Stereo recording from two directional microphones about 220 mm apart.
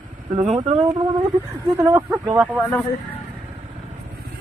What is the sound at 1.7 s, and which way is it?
Speech, 15° right (ahead or behind).